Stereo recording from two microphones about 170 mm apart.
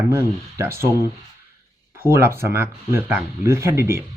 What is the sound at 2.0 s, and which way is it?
Speech, 15° right (ahead or behind).